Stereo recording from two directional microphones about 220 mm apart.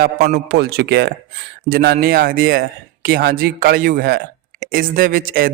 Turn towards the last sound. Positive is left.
turn(degrees=-40)  # may be behind; listen again after turning